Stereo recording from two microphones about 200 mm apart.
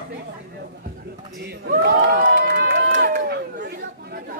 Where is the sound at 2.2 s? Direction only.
45° right (ahead or behind).